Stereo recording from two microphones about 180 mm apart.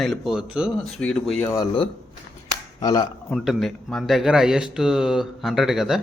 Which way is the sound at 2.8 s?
25° left (ahead or behind).